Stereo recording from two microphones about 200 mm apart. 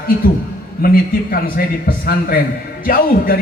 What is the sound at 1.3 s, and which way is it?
A man's voice, 45° left (ahead or behind).